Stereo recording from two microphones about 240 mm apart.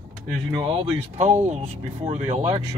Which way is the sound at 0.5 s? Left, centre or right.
Right.